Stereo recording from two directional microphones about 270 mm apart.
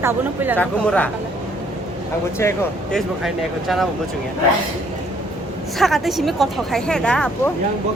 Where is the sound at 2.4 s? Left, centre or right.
Centre.